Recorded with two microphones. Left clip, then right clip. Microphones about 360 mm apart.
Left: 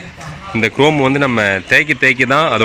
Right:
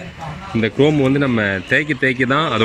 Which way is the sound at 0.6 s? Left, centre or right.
Centre.